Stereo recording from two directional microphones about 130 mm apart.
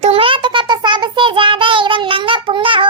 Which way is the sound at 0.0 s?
45° right (ahead or behind).